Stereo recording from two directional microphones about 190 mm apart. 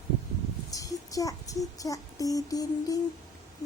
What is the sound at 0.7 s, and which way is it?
Music, 15° left (ahead or behind).